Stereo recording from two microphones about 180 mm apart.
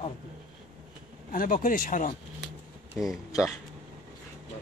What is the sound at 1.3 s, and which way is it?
Speech, 50° left (ahead or behind).